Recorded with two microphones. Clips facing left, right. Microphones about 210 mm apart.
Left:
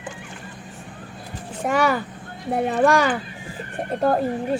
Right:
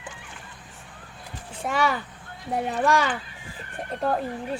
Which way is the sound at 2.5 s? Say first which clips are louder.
Left 5 dB; 60° left (ahead or behind).